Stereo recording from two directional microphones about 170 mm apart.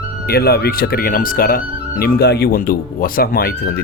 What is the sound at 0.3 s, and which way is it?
Speech, 65° left (ahead or behind).